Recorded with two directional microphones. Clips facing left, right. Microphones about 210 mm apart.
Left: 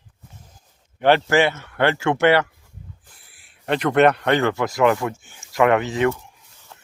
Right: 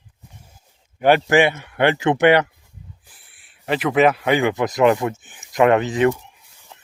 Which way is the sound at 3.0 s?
Centre (ahead or behind).